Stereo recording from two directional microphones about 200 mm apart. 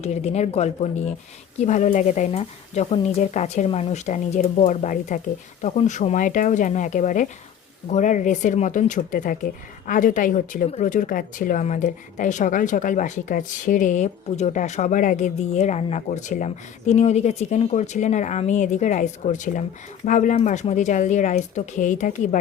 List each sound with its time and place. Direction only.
0.0 s speech: 35° left (ahead or behind)